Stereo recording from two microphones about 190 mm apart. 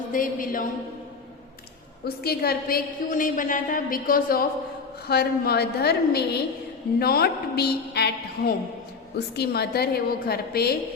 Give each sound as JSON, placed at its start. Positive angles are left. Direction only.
{"t": 0.1, "sound": "a woman's voice", "side_deg": 45}
{"t": 2.0, "sound": "a woman's voice", "side_deg": 55}